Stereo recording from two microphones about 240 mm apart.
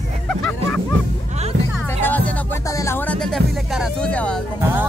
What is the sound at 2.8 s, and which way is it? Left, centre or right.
Speech, centre.